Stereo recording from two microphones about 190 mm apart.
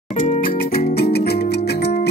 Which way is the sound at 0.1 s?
40° left (ahead or behind).